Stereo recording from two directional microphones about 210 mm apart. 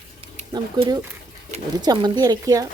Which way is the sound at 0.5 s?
20° right (ahead or behind).